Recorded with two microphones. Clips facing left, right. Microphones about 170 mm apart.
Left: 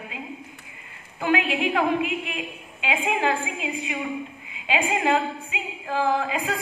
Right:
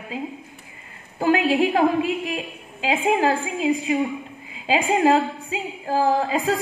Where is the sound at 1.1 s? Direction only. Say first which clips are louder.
Right 5 dB; 35° right (ahead or behind).